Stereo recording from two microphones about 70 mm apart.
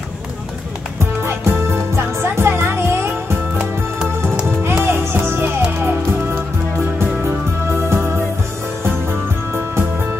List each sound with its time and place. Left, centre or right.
1.2 s music: right
4.8 s music: right